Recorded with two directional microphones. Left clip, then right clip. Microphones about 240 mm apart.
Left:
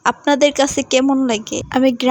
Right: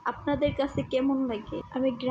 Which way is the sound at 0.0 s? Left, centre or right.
Left.